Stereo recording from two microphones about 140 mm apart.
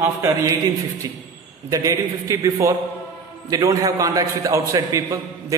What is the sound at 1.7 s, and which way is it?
A man's voice, 25° right (ahead or behind).